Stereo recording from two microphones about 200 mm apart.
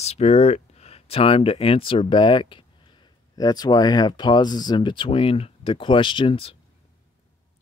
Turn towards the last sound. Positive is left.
turn(degrees=25)  # may be behind; listen again after turning